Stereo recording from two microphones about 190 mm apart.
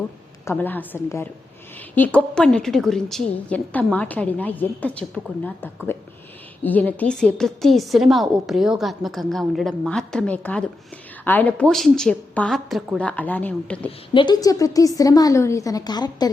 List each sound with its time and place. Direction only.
0.4 s a woman's voice: 10° left (ahead or behind)
14.1 s a woman's voice: 25° left (ahead or behind)